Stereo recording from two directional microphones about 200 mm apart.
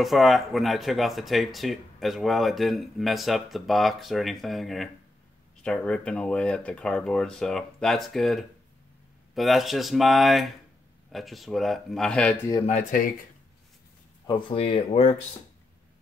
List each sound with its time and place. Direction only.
0.0 s speech: centre (ahead or behind)
12.6 s speech: 40° left (ahead or behind)
14.2 s speech: 25° left (ahead or behind)